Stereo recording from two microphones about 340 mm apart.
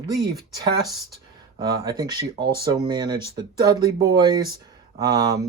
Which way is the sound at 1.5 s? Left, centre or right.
Centre.